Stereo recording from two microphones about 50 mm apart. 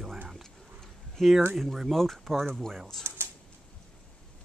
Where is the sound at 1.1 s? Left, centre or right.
Centre.